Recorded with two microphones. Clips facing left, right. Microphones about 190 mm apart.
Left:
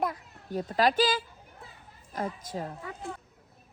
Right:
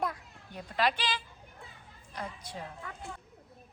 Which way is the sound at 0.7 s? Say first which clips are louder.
Left 6 dB; 45° left (ahead or behind).